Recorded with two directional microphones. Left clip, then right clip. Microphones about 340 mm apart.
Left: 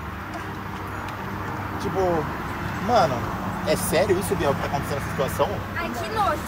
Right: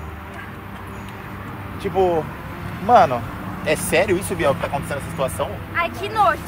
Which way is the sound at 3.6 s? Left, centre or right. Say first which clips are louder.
Right 4 dB; right.